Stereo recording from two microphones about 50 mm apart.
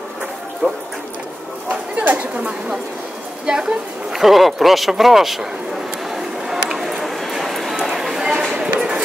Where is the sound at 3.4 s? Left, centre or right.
Centre.